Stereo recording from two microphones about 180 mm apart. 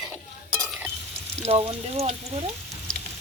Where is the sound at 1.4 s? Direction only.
30° right (ahead or behind).